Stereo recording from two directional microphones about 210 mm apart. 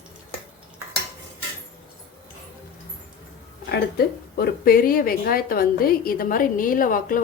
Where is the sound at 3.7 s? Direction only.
50° left (ahead or behind).